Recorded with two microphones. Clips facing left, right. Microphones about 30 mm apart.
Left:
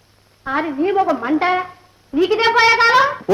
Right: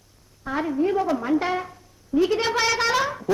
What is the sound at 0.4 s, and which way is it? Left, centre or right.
Speech, left.